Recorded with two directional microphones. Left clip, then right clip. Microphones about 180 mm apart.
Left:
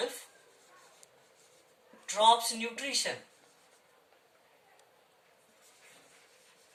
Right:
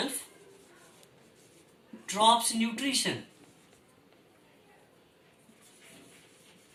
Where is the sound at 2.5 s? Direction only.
20° left (ahead or behind).